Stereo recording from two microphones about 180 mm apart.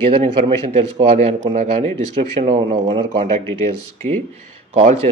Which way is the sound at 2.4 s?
30° right (ahead or behind).